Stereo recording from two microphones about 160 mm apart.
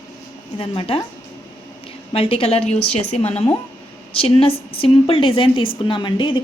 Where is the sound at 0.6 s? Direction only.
35° left (ahead or behind).